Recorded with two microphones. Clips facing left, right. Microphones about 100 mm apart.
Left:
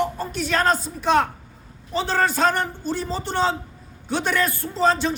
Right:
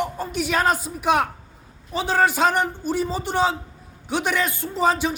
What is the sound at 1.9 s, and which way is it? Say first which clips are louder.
Speech: right 1 dB; 10° right (ahead or behind).